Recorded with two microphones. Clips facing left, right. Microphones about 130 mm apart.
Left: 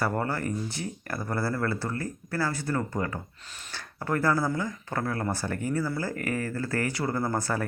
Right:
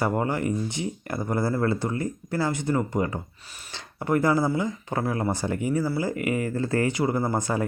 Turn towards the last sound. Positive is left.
turn(degrees=-15)  # may be behind; listen again after turning